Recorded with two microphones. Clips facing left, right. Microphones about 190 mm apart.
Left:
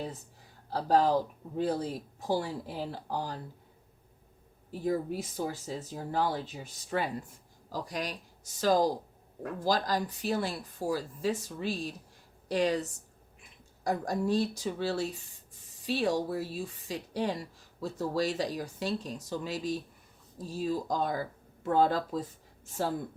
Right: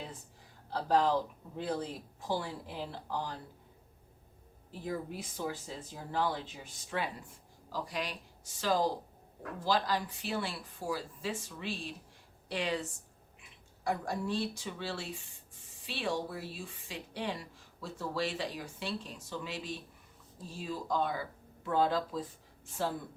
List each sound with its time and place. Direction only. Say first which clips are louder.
0.7 s speech: left 3 dB; 40° left (ahead or behind)
4.7 s a woman's voice: left 7 dB; 40° left (ahead or behind)